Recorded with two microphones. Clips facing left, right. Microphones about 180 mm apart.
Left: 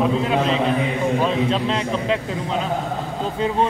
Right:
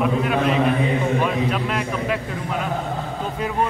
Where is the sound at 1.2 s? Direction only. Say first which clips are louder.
Left 2 dB; 25° left (ahead or behind).